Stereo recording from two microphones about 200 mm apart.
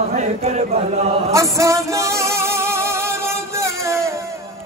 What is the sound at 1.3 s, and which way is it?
Music, 15° right (ahead or behind).